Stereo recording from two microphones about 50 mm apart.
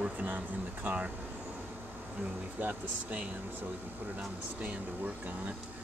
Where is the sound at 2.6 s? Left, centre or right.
Right.